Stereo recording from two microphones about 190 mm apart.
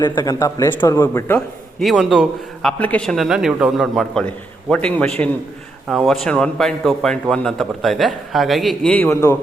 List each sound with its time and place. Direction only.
0.0 s speech: 20° left (ahead or behind)
1.8 s a man's voice: centre (ahead or behind)